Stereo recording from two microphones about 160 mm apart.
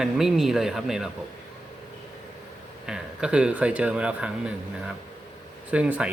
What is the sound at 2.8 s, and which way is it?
Speech, 5° right (ahead or behind).